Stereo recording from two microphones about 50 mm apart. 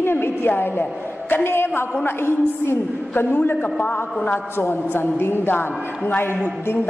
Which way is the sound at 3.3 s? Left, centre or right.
Left.